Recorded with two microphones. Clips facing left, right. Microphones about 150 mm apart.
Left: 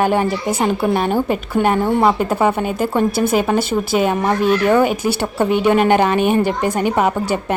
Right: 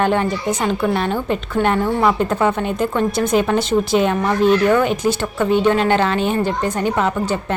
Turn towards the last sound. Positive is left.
turn(degrees=10)  # may be behind; listen again after turning